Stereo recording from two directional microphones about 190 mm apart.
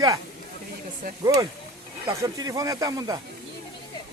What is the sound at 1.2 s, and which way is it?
Speech, 20° right (ahead or behind).